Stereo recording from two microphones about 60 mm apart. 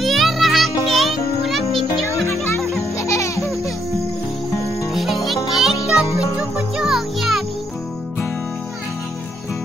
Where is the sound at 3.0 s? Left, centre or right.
Left.